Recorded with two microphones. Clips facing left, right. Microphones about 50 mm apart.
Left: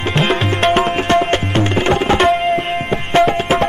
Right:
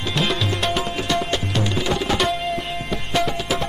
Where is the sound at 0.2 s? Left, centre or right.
Left.